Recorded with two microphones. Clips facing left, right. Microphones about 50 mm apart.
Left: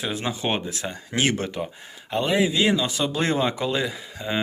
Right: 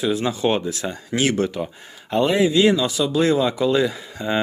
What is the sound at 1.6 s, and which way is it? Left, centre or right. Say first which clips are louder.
Speech: right 3 dB; centre.